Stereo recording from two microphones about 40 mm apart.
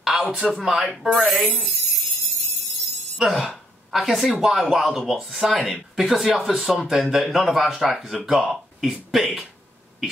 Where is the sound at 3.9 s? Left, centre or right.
Centre.